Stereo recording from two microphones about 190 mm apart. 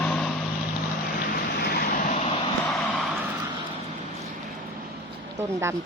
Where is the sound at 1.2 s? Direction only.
50° left (ahead or behind); by 2.5 s 35° left (ahead or behind).